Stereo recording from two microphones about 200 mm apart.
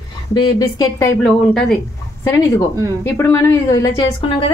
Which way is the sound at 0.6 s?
15° left (ahead or behind).